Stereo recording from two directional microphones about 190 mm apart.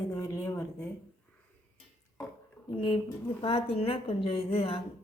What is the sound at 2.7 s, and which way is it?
A woman's voice, 25° left (ahead or behind).